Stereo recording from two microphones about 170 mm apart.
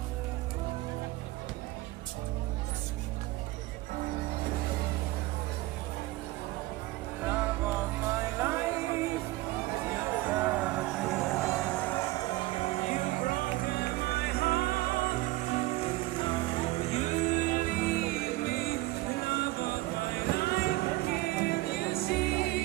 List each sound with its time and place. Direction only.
7.2 s music: 10° right (ahead or behind)
10.3 s music: 10° right (ahead or behind); by 12.1 s 10° left (ahead or behind)
12.2 s music: 25° left (ahead or behind); by 22.6 s 65° left (ahead or behind)